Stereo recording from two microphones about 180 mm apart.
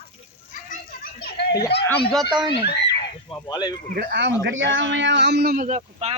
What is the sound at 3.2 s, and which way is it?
Speech, 25° left (ahead or behind).